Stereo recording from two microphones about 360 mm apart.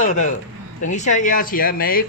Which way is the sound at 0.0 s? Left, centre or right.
Centre.